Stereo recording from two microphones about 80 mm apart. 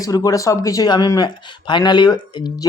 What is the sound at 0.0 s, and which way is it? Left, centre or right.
Speech, left.